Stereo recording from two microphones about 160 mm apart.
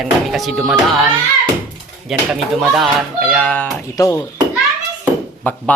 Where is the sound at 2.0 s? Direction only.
Centre (ahead or behind).